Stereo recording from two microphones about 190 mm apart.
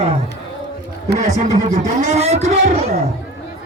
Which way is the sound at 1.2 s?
40° right (ahead or behind).